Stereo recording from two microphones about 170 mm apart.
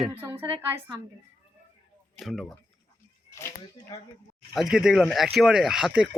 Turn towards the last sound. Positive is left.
turn(degrees=-5)  # may be behind; listen again after turning